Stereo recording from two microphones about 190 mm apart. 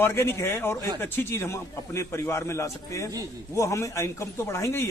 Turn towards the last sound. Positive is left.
turn(degrees=15)  # may be behind; listen again after turning